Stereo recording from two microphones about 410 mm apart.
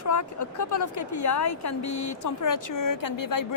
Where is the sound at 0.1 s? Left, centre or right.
Left.